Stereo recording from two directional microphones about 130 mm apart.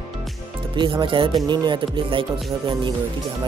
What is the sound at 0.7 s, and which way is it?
Music, 40° right (ahead or behind).